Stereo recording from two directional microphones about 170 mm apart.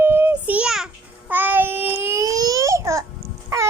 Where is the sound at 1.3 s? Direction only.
10° right (ahead or behind).